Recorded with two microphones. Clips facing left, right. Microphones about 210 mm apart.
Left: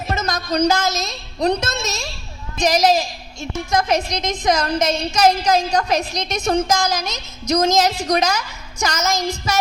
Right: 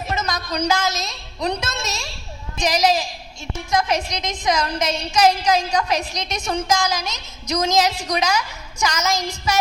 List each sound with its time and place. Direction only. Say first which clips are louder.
0.1 s a woman's voice: left 4 dB; 45° left (ahead or behind)